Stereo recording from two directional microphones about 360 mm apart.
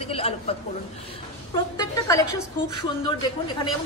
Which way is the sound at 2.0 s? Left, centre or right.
Centre.